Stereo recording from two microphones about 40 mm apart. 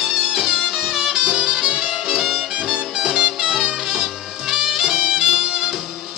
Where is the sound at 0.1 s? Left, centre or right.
Centre.